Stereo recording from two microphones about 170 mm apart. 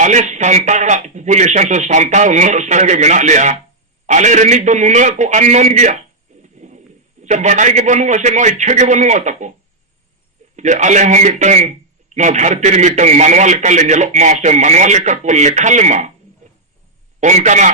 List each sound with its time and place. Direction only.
0.0 s a man's voice: 45° right (ahead or behind)
6.4 s a sound: 45° right (ahead or behind)
7.2 s a man's voice: 45° right (ahead or behind)
10.6 s a man's voice: 45° right (ahead or behind)
17.2 s a man's voice: 45° right (ahead or behind)